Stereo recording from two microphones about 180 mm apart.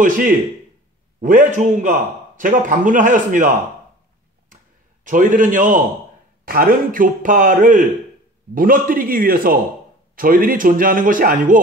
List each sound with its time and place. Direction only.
0.0 s a man's voice: 45° right (ahead or behind)
5.0 s a man's voice: 50° right (ahead or behind)